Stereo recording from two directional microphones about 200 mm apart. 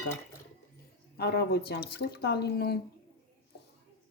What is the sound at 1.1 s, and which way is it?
A woman's voice, 55° left (ahead or behind).